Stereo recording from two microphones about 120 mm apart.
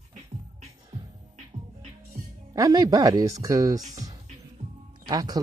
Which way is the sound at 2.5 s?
30° right (ahead or behind).